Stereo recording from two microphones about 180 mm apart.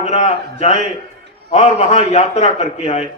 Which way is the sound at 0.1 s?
40° left (ahead or behind).